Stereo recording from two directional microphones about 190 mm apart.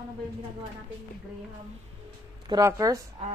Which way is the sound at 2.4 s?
20° right (ahead or behind).